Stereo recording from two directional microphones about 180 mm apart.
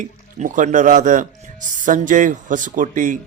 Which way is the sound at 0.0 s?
45° right (ahead or behind).